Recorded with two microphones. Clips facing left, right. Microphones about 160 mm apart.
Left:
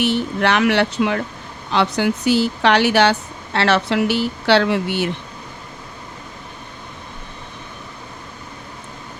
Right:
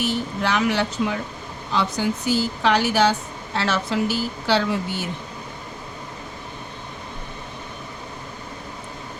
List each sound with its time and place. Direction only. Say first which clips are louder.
0.0 s speech: left 5 dB; 70° left (ahead or behind)